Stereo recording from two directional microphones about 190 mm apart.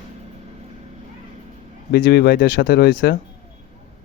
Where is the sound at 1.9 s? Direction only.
55° left (ahead or behind).